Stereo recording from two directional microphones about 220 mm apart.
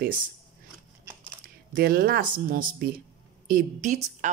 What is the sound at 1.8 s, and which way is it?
Speech, 45° right (ahead or behind).